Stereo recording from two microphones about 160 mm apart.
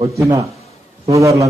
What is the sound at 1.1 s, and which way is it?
Speech, 20° right (ahead or behind).